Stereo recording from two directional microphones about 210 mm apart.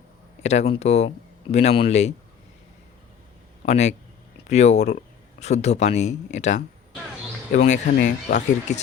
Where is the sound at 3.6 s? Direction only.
30° left (ahead or behind).